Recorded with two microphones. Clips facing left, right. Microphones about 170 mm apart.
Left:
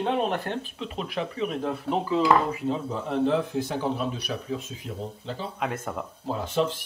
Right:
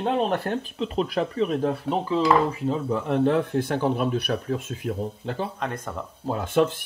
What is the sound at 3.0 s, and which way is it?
Speech, 60° right (ahead or behind).